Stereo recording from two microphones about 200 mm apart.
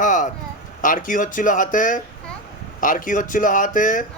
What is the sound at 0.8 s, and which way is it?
A man's voice, 40° left (ahead or behind).